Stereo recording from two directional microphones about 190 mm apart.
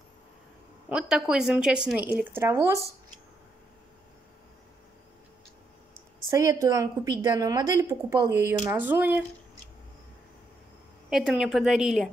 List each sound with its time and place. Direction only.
0.8 s a woman's voice: 5° right (ahead or behind)
6.2 s a woman's voice: 15° right (ahead or behind)
11.1 s a woman's voice: centre (ahead or behind)